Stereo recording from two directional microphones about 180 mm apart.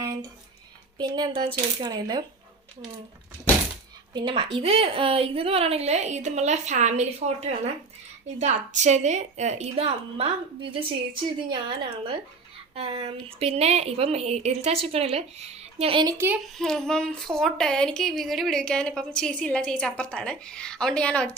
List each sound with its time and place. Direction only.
0.0 s a sound: 20° right (ahead or behind)
0.9 s speech: 25° right (ahead or behind)
4.1 s a woman's voice: 25° right (ahead or behind); by 7.4 s 40° right (ahead or behind)
8.4 s a woman's voice: 40° right (ahead or behind)
16.1 s a child's voice: 10° right (ahead or behind)
16.6 s a woman's voice: centre (ahead or behind)